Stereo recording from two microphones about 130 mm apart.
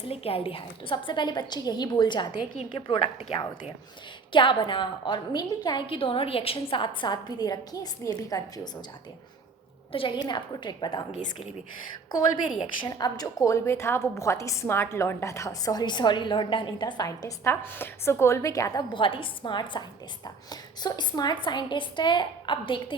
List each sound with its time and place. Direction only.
0.1 s a woman's voice: 45° left (ahead or behind)
3.2 s a woman's voice: 40° left (ahead or behind)
9.9 s a woman's voice: 40° left (ahead or behind)
12.1 s a woman's voice: 35° left (ahead or behind)